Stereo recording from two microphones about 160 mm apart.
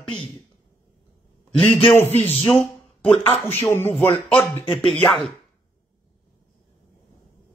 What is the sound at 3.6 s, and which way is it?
Speech, 15° left (ahead or behind).